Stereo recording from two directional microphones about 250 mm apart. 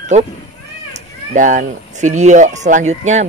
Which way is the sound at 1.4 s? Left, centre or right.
Right.